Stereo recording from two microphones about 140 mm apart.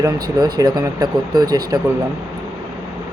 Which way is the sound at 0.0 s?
30° right (ahead or behind).